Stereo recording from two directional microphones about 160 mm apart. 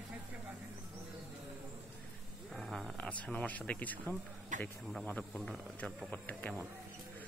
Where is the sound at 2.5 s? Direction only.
Centre (ahead or behind).